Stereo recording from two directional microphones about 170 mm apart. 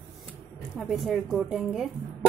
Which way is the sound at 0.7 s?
Centre (ahead or behind).